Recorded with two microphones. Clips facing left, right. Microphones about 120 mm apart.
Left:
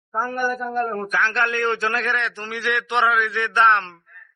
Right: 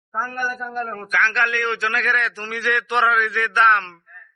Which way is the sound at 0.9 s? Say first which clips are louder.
Even; 30° left (ahead or behind).